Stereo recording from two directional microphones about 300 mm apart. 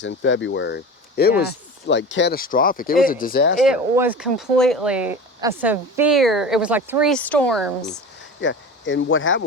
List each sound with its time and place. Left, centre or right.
0.0 s speech: left
3.6 s speech: centre
8.4 s speech: left